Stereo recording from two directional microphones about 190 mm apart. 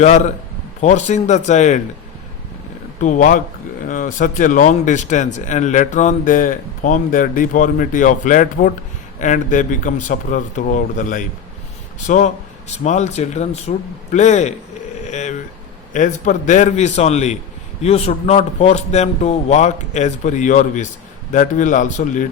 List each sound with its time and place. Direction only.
0.8 s a man's voice: 40° left (ahead or behind)
3.0 s a man's voice: 45° left (ahead or behind)
15.0 s a sound: 40° left (ahead or behind)
15.9 s a man's voice: 40° left (ahead or behind)